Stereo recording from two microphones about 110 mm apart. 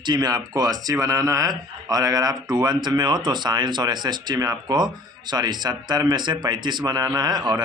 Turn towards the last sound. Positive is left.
turn(degrees=-40)  # may be behind; listen again after turning